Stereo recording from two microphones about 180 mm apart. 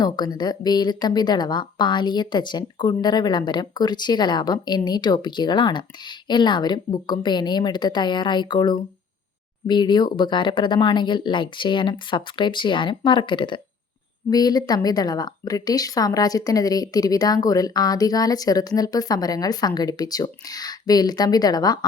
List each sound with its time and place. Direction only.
0.0 s speech: 25° left (ahead or behind)